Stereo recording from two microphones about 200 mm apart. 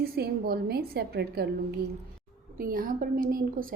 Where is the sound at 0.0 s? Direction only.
50° right (ahead or behind).